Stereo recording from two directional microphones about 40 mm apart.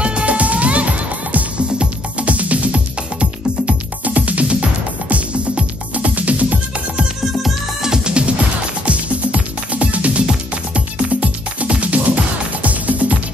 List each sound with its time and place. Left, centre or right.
0.0 s music: right
7.4 s music: centre
8.0 s music: right